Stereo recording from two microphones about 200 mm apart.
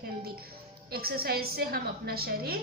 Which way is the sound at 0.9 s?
50° right (ahead or behind).